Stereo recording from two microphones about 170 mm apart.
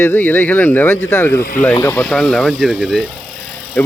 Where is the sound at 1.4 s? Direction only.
55° left (ahead or behind).